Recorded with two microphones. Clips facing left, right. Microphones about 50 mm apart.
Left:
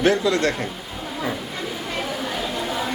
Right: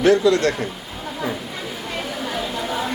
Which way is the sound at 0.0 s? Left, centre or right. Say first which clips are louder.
Right 3 dB; left.